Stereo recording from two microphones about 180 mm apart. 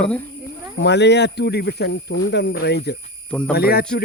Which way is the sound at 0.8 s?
70° left (ahead or behind).